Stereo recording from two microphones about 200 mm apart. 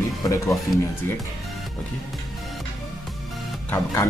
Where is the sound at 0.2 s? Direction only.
15° left (ahead or behind).